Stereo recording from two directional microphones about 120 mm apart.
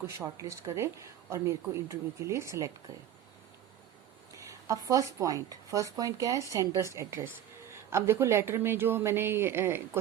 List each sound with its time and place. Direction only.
0.3 s speech: 25° right (ahead or behind)
4.4 s speech: 25° right (ahead or behind)